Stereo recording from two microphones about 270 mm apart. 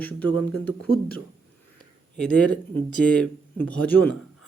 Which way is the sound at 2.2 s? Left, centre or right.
Centre.